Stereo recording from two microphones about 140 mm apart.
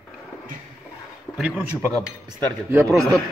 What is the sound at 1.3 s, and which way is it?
Speech, 10° right (ahead or behind).